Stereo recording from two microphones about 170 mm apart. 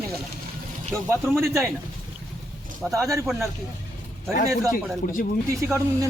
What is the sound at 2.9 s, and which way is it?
Speech, 15° right (ahead or behind).